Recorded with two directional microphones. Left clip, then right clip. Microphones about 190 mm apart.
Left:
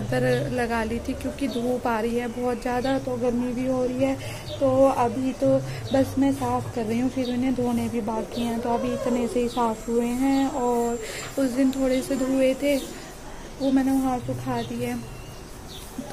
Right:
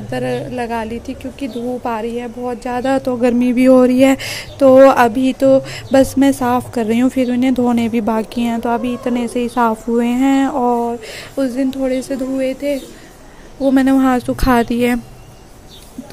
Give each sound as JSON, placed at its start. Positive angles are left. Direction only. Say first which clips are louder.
{"t": 0.1, "sound": "a woman's voice", "louder": "right 3 dB", "side_deg": -15}
{"t": 3.2, "sound": "speech", "louder": "right 11 dB", "side_deg": -50}
{"t": 6.8, "sound": "music", "louder": "right 11 dB", "side_deg": -40}
{"t": 8.6, "sound": "music", "louder": "right 5 dB", "side_deg": -25}
{"t": 11.1, "sound": "a woman's voice", "louder": "right 6 dB", "side_deg": -25}
{"t": 13.7, "sound": "speech", "louder": "right 11 dB", "side_deg": -50}